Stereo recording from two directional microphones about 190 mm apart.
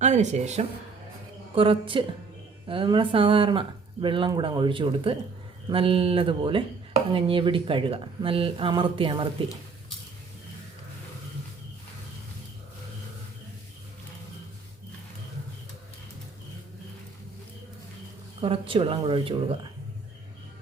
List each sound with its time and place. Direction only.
0.0 s speech: 40° right (ahead or behind)
18.3 s speech: 30° right (ahead or behind)